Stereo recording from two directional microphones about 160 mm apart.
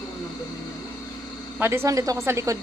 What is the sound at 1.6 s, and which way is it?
A woman's voice, 15° right (ahead or behind).